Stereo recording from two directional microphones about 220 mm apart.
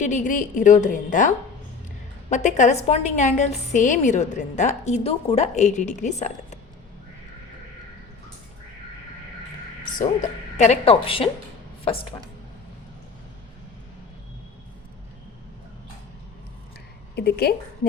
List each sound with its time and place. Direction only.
0.0 s a woman's voice: 35° left (ahead or behind)
2.3 s a woman's voice: 30° left (ahead or behind)
10.6 s a woman's voice: 30° left (ahead or behind)
17.2 s a woman's voice: 45° left (ahead or behind)